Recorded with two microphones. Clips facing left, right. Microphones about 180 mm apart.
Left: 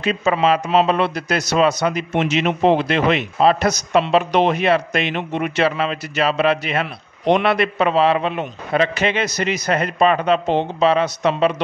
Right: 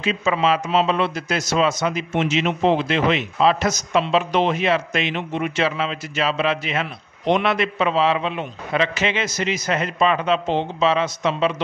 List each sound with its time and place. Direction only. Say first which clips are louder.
0.0 s speech: left 3 dB; 55° left (ahead or behind)